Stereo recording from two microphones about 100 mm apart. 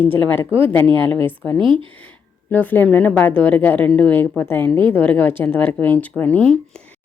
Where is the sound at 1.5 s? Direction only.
55° right (ahead or behind).